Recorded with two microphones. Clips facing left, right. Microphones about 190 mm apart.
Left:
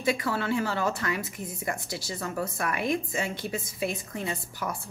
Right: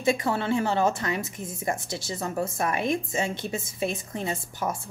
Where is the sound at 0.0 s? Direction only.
25° right (ahead or behind).